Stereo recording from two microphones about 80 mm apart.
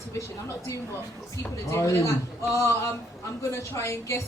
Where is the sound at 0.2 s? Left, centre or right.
Left.